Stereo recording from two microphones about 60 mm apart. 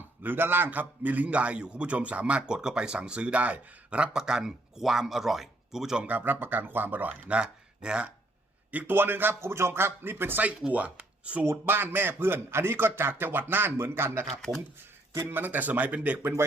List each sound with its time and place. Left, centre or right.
0.2 s a man's voice: right; by 6.0 s centre
6.0 s speech: right
7.3 s speech: centre
9.0 s speech: right
9.4 s speech: right
10.7 s speech: right
11.4 s speech: right
15.3 s speech: right